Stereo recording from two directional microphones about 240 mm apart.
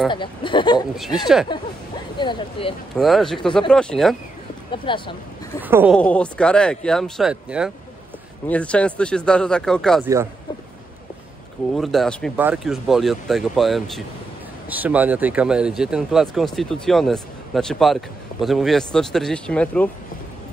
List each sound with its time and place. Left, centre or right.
0.1 s speech: centre
0.9 s speech: centre
2.1 s speech: centre
3.0 s speech: centre
4.6 s speech: left
5.6 s speech: centre
5.9 s speech: centre
11.7 s speech: centre